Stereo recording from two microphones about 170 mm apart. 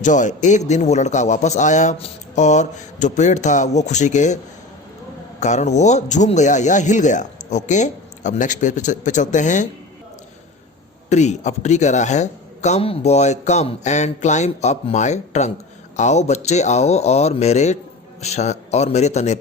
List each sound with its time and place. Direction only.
0.0 s speech: 45° left (ahead or behind)
5.4 s speech: 45° left (ahead or behind)
11.1 s speech: 40° left (ahead or behind)